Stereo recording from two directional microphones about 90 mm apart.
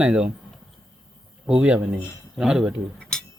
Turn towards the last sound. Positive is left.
turn(degrees=5)  # may be behind; listen again after turning